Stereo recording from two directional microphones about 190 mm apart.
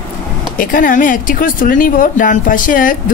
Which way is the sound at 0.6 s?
45° left (ahead or behind).